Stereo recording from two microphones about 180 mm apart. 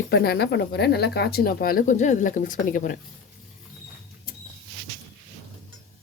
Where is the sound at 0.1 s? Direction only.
65° left (ahead or behind); by 2.9 s 50° left (ahead or behind).